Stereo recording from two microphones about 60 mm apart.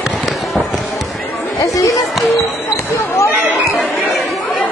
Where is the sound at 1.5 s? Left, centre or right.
Left.